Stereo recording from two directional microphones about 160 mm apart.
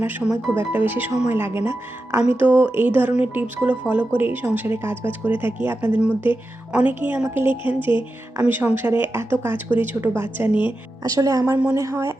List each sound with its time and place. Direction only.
0.0 s speech: 10° right (ahead or behind)